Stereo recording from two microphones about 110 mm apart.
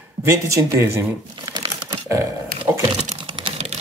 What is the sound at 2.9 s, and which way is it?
Typing, 70° right (ahead or behind).